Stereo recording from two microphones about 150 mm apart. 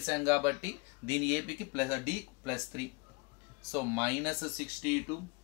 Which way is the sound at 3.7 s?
15° right (ahead or behind).